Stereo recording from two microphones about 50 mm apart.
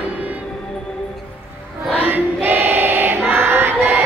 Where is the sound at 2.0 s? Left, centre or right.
Right.